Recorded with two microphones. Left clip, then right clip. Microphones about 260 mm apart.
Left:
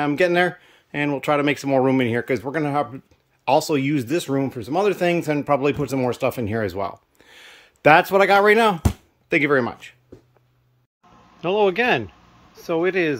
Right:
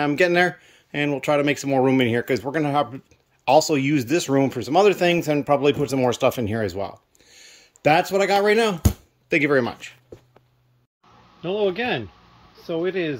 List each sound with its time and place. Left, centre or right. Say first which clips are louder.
0.0 s speech: even; centre
11.4 s speech: left 4 dB; centre